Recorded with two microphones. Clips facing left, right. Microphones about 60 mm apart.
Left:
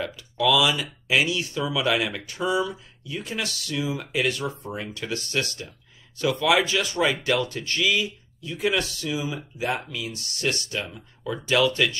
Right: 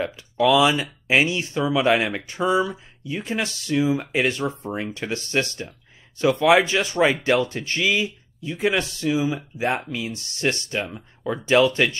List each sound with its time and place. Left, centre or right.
0.0 s speech: right